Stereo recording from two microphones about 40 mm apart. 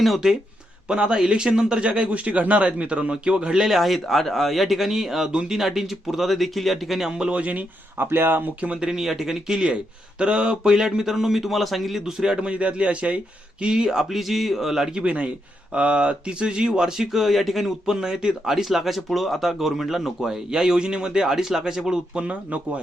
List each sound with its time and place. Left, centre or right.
0.9 s a man's voice: right
3.8 s speech: centre
7.2 s speech: right
7.9 s speech: right
9.0 s speech: centre
12.4 s speech: right; by 15.0 s centre
15.0 s a man's voice: right
17.1 s speech: centre
17.8 s speech: centre
22.1 s speech: right